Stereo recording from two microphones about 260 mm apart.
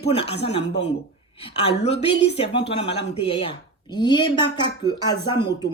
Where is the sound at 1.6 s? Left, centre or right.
Left.